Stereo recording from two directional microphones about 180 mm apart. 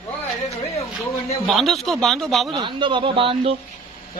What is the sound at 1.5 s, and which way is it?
Speech, centre (ahead or behind).